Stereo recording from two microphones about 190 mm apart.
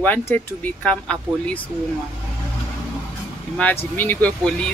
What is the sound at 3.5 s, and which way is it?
Speech, 10° left (ahead or behind).